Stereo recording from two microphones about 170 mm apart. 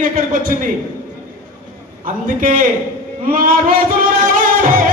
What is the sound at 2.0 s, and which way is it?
Speech, 55° right (ahead or behind).